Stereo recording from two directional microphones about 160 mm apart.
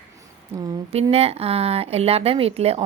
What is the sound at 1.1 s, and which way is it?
A woman's voice, 40° right (ahead or behind).